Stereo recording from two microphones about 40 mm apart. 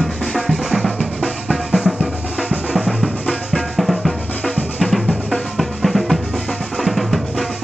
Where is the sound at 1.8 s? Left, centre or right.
Centre.